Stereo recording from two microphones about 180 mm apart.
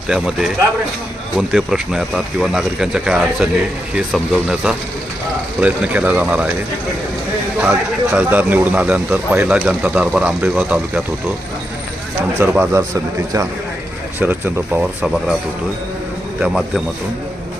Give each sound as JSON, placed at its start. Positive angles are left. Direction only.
{"t": 0.1, "sound": "speech", "side_deg": -5}
{"t": 7.6, "sound": "speech", "side_deg": -5}
{"t": 12.4, "sound": "speech", "side_deg": -15}
{"t": 14.2, "sound": "speech", "side_deg": -10}
{"t": 16.4, "sound": "speech", "side_deg": 0}